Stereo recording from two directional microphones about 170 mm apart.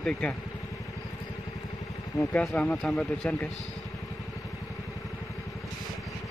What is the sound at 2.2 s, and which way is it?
Speech, 5° left (ahead or behind).